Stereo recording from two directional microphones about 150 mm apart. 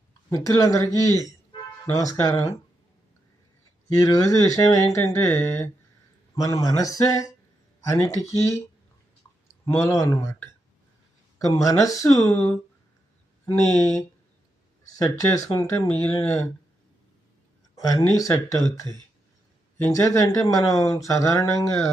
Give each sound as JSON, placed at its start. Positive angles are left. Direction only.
{"t": 0.3, "sound": "speech", "side_deg": 20}
{"t": 1.9, "sound": "speech", "side_deg": 25}
{"t": 3.9, "sound": "speech", "side_deg": 20}
{"t": 9.6, "sound": "speech", "side_deg": 20}
{"t": 17.7, "sound": "speech", "side_deg": 20}
{"t": 19.8, "sound": "speech", "side_deg": 20}